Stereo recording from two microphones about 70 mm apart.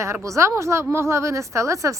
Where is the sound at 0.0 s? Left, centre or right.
Right.